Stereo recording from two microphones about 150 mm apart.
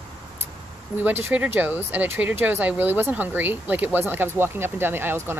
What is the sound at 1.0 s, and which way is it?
Speech, 10° right (ahead or behind).